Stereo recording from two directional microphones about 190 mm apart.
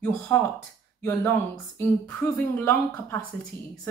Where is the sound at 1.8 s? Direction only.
10° left (ahead or behind).